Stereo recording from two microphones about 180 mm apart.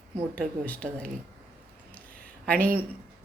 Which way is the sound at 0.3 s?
5° left (ahead or behind).